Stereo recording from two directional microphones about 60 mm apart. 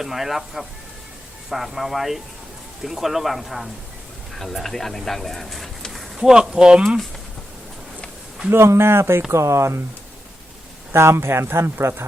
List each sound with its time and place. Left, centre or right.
0.0 s speech: centre
8.4 s speech: right
9.3 s speech: right
10.9 s speech: right